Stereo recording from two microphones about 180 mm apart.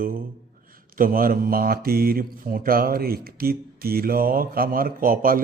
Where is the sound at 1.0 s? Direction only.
50° right (ahead or behind).